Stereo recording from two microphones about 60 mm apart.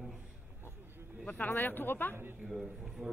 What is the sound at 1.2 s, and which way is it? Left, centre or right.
Speech, left.